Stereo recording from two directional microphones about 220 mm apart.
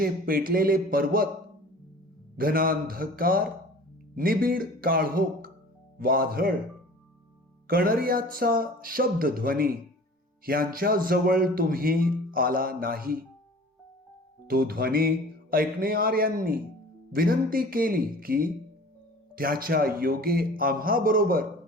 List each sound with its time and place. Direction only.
0.0 s a man's voice: 40° right (ahead or behind)
2.4 s a man's voice: 40° right (ahead or behind)
7.7 s a man's voice: 40° right (ahead or behind)
14.4 s a man's voice: 45° right (ahead or behind)